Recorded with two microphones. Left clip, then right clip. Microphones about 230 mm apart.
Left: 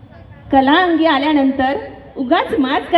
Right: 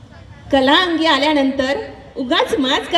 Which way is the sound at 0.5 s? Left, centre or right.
Right.